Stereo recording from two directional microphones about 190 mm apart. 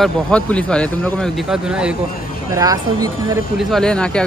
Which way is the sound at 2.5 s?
20° right (ahead or behind).